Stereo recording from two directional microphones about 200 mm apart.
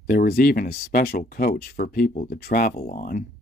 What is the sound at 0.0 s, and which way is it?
Speech, 45° left (ahead or behind).